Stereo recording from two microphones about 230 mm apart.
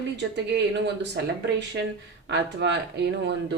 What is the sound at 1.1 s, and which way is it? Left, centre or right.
Speech, right.